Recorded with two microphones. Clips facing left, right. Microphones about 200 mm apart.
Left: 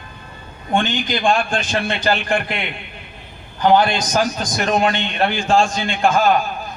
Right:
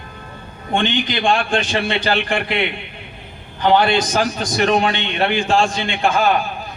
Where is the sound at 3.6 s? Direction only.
45° left (ahead or behind).